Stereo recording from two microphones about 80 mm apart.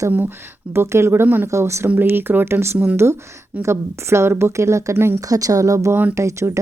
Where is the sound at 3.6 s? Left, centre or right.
Right.